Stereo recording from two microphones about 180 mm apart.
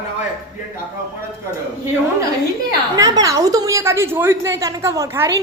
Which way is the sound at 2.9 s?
20° right (ahead or behind).